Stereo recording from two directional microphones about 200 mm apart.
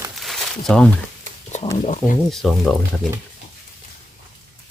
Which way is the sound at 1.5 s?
35° left (ahead or behind).